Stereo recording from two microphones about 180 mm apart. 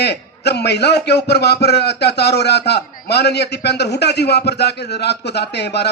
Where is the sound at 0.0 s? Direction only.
65° left (ahead or behind).